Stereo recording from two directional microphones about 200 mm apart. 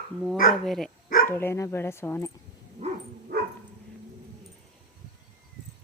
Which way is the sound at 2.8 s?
30° right (ahead or behind).